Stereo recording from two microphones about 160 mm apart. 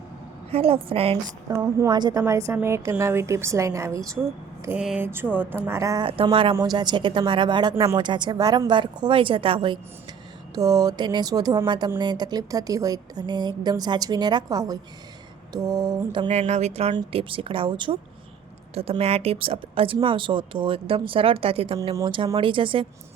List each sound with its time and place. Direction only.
0.5 s speech: 35° right (ahead or behind)
1.5 s speech: 25° right (ahead or behind)
2.2 s a woman's voice: 15° right (ahead or behind)
4.8 s a woman's voice: 5° right (ahead or behind); by 6.1 s 20° right (ahead or behind)
6.2 s speech: 35° right (ahead or behind)
16.3 s a woman's voice: 45° right (ahead or behind)